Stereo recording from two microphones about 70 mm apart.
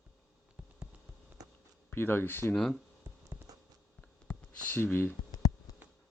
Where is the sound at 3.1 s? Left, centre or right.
Right.